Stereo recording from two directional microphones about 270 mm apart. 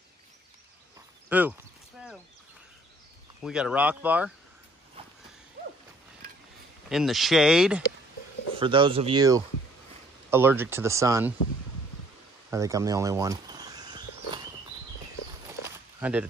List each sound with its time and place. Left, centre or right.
1.3 s speech: centre
3.4 s speech: centre
6.9 s speech: centre
8.5 s speech: centre
12.4 s a sound: centre
16.0 s speech: centre